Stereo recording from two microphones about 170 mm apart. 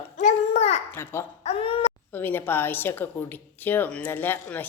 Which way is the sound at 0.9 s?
15° left (ahead or behind).